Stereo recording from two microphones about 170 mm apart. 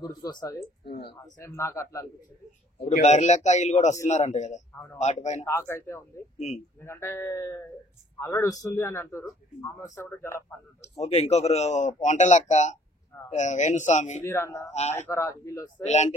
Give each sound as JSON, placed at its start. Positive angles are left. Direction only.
{"t": 0.0, "sound": "speech", "side_deg": 25}
{"t": 3.0, "sound": "speech", "side_deg": 40}
{"t": 5.4, "sound": "speech", "side_deg": 15}
{"t": 11.0, "sound": "speech", "side_deg": 40}
{"t": 14.2, "sound": "speech", "side_deg": 15}
{"t": 14.7, "sound": "speech", "side_deg": 40}
{"t": 15.0, "sound": "speech", "side_deg": 15}
{"t": 15.8, "sound": "speech", "side_deg": 40}